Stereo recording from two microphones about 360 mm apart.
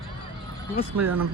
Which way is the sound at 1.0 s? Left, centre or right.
Right.